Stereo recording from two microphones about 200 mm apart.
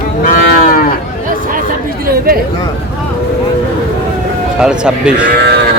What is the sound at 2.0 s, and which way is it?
Chatter, 50° right (ahead or behind).